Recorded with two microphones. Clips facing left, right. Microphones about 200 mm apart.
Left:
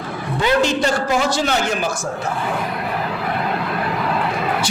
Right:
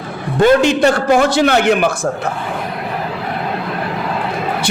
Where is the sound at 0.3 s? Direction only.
55° right (ahead or behind).